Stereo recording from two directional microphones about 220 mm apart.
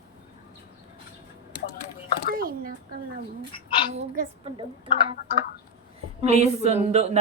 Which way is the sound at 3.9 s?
30° right (ahead or behind).